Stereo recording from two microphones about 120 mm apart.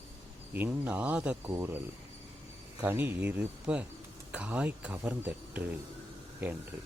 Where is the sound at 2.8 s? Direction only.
15° right (ahead or behind).